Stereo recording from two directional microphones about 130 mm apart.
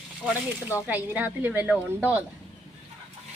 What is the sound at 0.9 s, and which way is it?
A woman's voice, 15° right (ahead or behind).